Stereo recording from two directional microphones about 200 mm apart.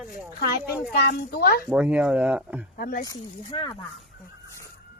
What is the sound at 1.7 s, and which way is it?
Speech, 5° right (ahead or behind).